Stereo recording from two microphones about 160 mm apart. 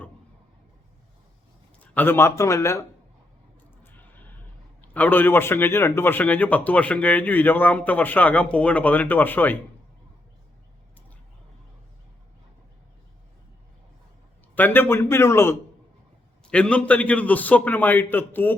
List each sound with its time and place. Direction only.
1.8 s a man's voice: 10° left (ahead or behind)
3.8 s a sound: 10° left (ahead or behind)
4.8 s a man's voice: 10° left (ahead or behind)
14.5 s a man's voice: 10° left (ahead or behind)